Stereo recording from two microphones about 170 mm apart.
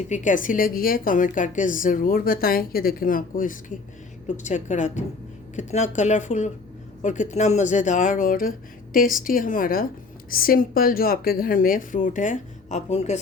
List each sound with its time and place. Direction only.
0.1 s a woman's voice: 50° left (ahead or behind)